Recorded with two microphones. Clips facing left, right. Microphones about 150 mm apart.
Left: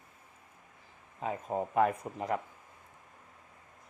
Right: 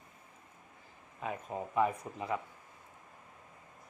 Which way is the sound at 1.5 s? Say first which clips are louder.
Left 3 dB; 55° left (ahead or behind).